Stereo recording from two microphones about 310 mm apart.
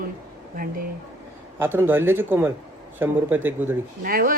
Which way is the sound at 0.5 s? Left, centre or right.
Right.